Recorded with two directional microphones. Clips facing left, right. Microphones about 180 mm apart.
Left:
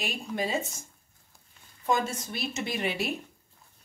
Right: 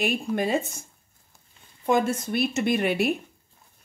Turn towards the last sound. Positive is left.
turn(degrees=-55)  # may be behind; listen again after turning